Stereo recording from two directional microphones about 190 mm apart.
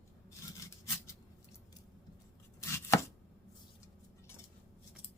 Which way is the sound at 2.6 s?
15° left (ahead or behind).